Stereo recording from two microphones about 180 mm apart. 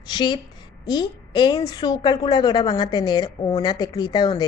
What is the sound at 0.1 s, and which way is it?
A woman's voice, 25° left (ahead or behind).